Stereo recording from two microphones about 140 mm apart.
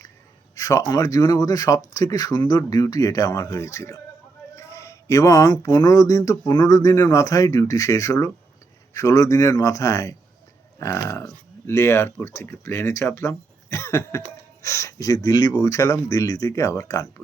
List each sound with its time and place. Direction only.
0.5 s speech: 25° left (ahead or behind)